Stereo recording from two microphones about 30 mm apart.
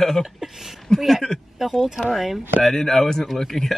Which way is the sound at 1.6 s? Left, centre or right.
Centre.